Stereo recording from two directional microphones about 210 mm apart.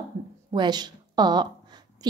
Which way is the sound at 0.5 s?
20° right (ahead or behind).